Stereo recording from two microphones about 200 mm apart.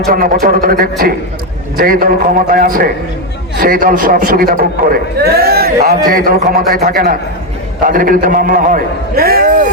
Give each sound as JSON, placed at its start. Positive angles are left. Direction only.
{"t": 0.1, "sound": "a man's voice", "side_deg": -45}